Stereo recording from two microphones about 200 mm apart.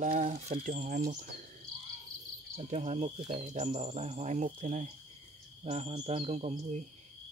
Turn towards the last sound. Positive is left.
turn(degrees=-35)  # may be behind; listen again after turning